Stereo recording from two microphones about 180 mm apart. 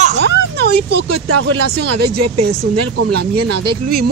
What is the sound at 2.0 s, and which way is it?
Speech, 60° right (ahead or behind).